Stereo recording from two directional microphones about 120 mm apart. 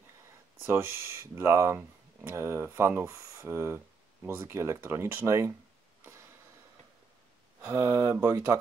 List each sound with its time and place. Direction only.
0.6 s speech: 20° right (ahead or behind)
7.6 s mantra: 20° right (ahead or behind)
8.2 s speech: 25° right (ahead or behind)